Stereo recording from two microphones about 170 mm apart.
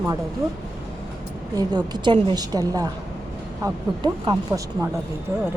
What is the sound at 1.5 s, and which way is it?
A woman's voice, 25° right (ahead or behind).